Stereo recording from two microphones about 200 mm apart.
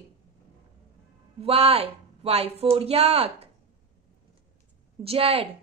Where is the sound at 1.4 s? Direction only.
30° right (ahead or behind).